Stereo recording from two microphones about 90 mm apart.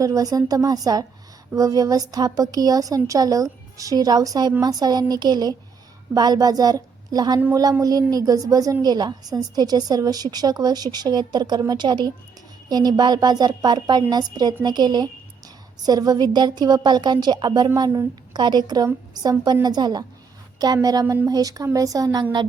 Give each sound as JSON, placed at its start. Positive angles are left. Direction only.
{"t": 0.0, "sound": "a woman's voice", "side_deg": -40}